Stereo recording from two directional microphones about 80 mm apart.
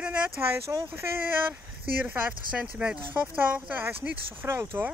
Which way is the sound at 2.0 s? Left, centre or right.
Centre.